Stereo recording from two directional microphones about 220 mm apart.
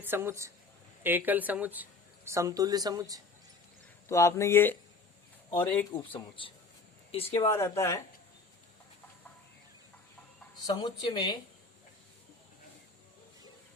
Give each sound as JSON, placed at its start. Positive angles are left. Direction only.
{"t": 0.0, "sound": "speech", "side_deg": -10}
{"t": 4.1, "sound": "speech", "side_deg": 15}
{"t": 5.9, "sound": "speech", "side_deg": 25}
{"t": 7.4, "sound": "speech", "side_deg": 15}
{"t": 10.7, "sound": "speech", "side_deg": 20}